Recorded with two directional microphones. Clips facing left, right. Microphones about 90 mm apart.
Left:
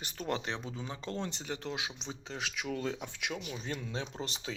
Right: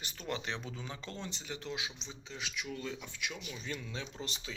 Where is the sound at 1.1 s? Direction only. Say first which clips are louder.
Left 9 dB; 55° left (ahead or behind).